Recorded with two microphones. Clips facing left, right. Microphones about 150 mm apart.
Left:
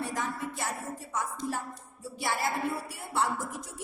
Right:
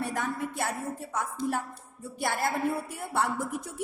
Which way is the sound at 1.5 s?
55° right (ahead or behind).